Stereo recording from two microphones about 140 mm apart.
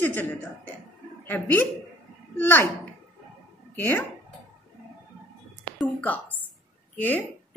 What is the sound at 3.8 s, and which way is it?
Speech, 15° left (ahead or behind).